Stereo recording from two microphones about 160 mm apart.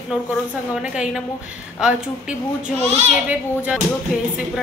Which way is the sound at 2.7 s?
40° right (ahead or behind).